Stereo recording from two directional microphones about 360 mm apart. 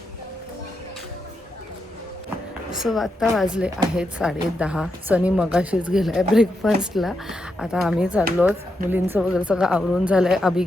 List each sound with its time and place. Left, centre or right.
2.7 s speech: centre